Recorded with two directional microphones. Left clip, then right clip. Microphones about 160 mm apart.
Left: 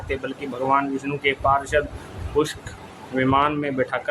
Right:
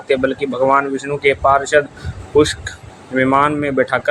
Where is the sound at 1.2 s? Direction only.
30° right (ahead or behind).